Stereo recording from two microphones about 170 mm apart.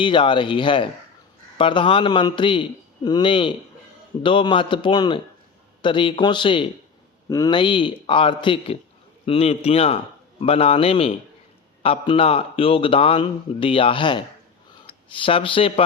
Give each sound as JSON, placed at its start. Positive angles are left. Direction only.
{"t": 0.0, "sound": "a man's voice", "side_deg": 30}